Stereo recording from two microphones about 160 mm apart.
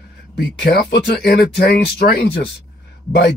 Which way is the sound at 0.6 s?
90° left.